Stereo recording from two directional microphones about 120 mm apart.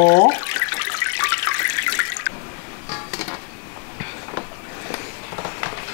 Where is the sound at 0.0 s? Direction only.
20° left (ahead or behind).